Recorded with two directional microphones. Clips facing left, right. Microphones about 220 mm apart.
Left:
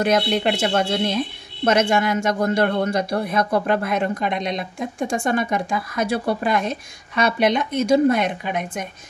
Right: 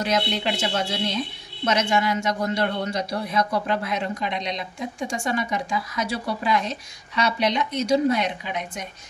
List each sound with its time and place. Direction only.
0.0 s speech: 55° left (ahead or behind)